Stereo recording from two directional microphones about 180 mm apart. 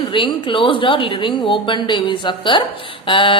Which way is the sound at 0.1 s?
30° left (ahead or behind).